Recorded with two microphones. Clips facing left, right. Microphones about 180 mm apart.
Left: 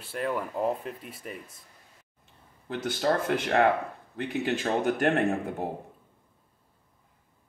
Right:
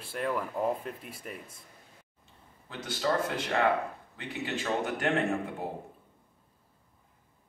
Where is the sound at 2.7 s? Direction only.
55° left (ahead or behind).